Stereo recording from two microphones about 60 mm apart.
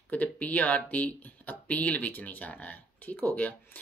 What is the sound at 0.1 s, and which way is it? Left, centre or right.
Speech, left.